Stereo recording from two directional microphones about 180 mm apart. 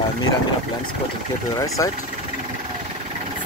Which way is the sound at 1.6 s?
20° left (ahead or behind).